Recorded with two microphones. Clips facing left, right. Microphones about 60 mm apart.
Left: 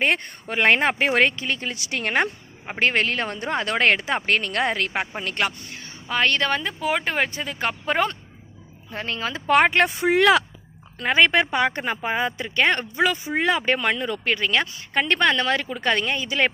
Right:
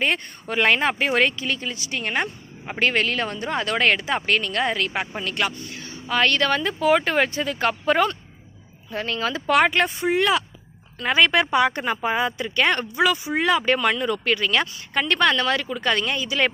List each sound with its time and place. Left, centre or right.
0.0 s speech: left
0.4 s speech: left
1.7 s a woman's voice: left
2.6 s speech: left
6.1 s speech: left
10.0 s speech: left
10.9 s speech: left